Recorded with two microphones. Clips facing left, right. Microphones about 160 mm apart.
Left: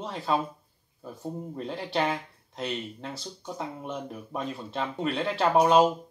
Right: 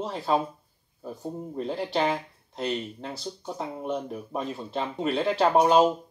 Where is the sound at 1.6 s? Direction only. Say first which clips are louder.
Right 2 dB; centre (ahead or behind).